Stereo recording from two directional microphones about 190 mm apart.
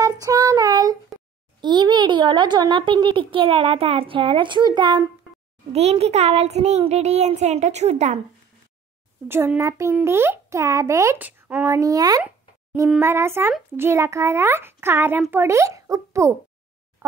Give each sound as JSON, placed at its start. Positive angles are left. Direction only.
{"t": 0.0, "sound": "child singing", "side_deg": -20}
{"t": 1.6, "sound": "a child's voice", "side_deg": -25}
{"t": 9.3, "sound": "a child's voice", "side_deg": -15}
{"t": 12.2, "sound": "a sound", "side_deg": -10}
{"t": 12.9, "sound": "a child's voice", "side_deg": -15}